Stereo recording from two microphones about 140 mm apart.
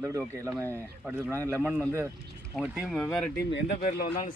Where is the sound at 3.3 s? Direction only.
85° left.